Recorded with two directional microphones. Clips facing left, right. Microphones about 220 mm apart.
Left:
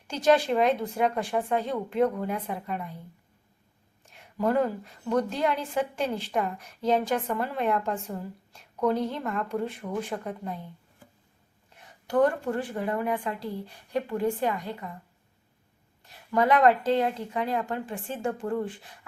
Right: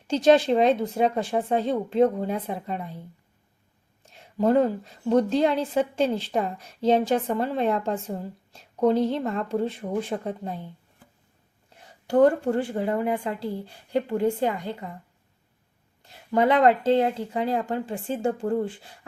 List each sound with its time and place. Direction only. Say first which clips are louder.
0.1 s a woman's voice: right 4 dB; 25° right (ahead or behind)
4.1 s a woman's voice: right 5 dB; 30° right (ahead or behind)
11.7 s a woman's voice: right 4 dB; 30° right (ahead or behind)
16.0 s a woman's voice: right 2 dB; 25° right (ahead or behind)